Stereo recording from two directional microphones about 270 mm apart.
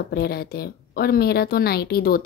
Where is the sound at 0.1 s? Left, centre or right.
Left.